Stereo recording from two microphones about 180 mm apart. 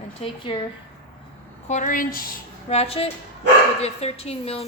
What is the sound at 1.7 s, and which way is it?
Speech, 45° left (ahead or behind).